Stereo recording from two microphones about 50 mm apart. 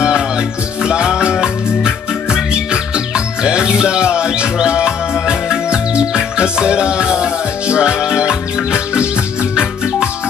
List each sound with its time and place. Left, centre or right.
0.8 s music: centre